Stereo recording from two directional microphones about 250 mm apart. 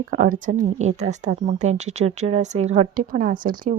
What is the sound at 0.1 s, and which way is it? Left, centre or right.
A woman's voice, right.